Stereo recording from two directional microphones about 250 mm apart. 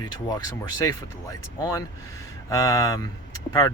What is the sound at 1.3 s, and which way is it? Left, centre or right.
Speech, centre.